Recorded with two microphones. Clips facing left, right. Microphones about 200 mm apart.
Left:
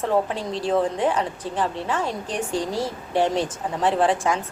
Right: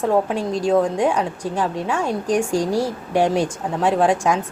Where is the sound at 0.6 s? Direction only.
10° right (ahead or behind).